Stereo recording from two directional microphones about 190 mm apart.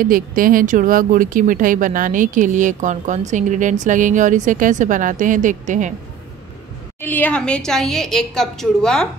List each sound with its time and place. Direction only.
0.0 s a woman's voice: 45° right (ahead or behind)
7.0 s a woman's voice: 10° left (ahead or behind)